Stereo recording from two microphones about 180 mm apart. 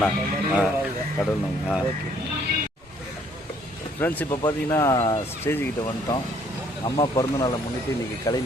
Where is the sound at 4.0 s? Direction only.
10° left (ahead or behind).